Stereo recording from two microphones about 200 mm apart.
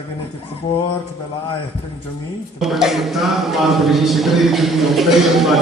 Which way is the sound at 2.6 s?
Centre (ahead or behind).